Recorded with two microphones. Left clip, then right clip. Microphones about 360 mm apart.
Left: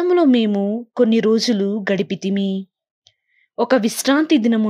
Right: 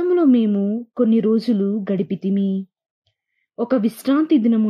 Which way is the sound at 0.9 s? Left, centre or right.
Left.